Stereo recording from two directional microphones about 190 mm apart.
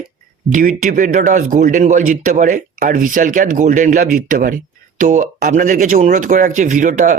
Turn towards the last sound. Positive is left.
turn(degrees=-40)  # may be behind; listen again after turning